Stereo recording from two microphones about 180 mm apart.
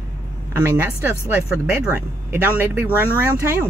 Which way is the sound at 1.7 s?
15° right (ahead or behind).